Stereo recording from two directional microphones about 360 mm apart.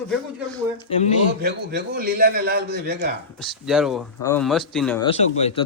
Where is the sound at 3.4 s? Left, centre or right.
Centre.